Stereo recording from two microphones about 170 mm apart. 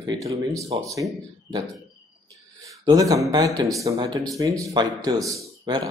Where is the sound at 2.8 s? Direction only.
20° right (ahead or behind).